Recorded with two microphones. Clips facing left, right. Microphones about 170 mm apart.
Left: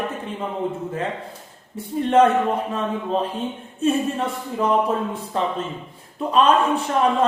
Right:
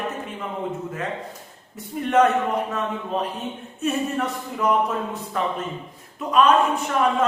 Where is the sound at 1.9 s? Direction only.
25° left (ahead or behind).